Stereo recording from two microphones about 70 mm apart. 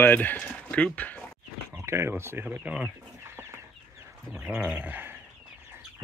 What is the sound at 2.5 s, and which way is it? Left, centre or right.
Chicken, centre.